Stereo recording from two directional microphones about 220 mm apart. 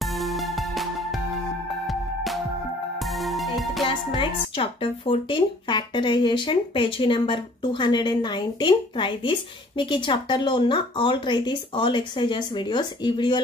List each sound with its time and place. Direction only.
0.0 s music: centre (ahead or behind)
3.0 s music: centre (ahead or behind)
3.8 s speech: 20° left (ahead or behind)